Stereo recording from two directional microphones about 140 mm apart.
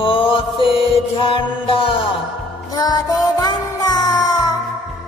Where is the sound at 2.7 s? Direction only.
25° left (ahead or behind).